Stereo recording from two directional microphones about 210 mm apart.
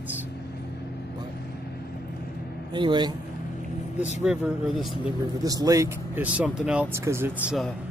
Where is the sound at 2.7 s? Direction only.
20° right (ahead or behind).